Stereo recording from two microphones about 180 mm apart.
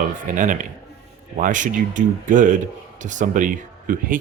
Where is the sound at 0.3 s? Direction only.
45° right (ahead or behind).